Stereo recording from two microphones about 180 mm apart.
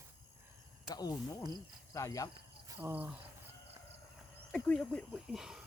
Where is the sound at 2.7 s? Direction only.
10° right (ahead or behind).